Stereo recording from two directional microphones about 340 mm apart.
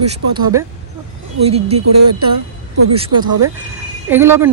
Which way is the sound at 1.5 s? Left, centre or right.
Centre.